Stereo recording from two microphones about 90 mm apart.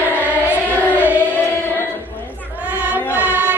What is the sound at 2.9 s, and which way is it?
Chant, 15° right (ahead or behind).